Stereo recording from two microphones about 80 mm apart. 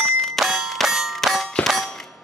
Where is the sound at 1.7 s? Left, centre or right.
Centre.